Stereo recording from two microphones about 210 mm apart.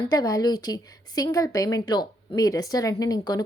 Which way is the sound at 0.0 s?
20° left (ahead or behind).